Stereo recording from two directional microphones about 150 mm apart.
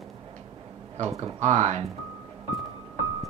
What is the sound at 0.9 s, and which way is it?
Speech, 45° right (ahead or behind).